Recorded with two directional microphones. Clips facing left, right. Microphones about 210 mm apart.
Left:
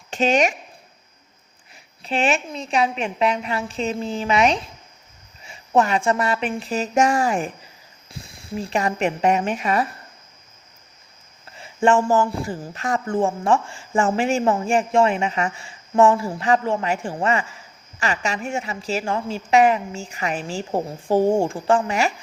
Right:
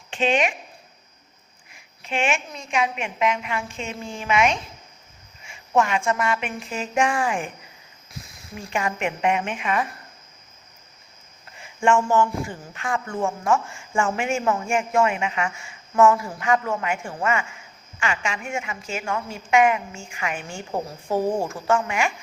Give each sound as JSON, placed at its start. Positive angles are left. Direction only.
{"t": 0.1, "sound": "speech", "side_deg": 40}
{"t": 1.7, "sound": "speech", "side_deg": 35}
{"t": 11.5, "sound": "speech", "side_deg": 35}